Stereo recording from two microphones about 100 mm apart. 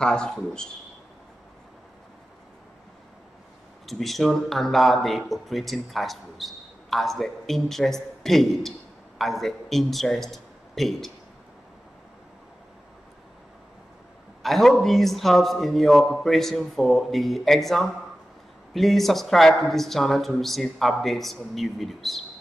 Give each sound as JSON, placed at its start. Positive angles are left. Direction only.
{"t": 0.0, "sound": "speech", "side_deg": 5}
{"t": 3.8, "sound": "speech", "side_deg": 0}
{"t": 14.4, "sound": "speech", "side_deg": 0}